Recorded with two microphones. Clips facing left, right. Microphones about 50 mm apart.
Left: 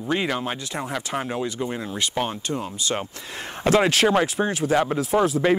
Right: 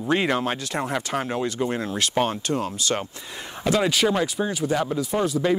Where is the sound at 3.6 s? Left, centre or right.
Left.